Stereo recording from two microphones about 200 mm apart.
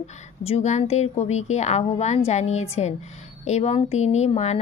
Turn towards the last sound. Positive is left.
turn(degrees=35)  # may be behind; listen again after turning